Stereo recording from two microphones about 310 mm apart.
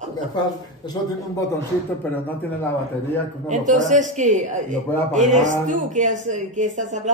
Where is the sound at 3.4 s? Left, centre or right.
Right.